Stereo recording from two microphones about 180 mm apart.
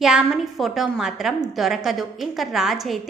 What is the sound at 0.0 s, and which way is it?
A woman's voice, centre (ahead or behind).